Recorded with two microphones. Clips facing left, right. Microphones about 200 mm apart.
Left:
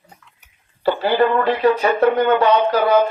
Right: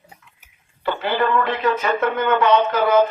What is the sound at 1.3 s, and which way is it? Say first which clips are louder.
Speech: left 4 dB; 35° left (ahead or behind).